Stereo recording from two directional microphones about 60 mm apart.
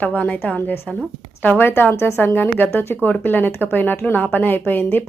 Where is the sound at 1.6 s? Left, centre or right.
Left.